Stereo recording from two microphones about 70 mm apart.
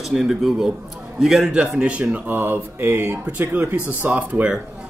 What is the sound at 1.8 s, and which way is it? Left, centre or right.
Speech, centre.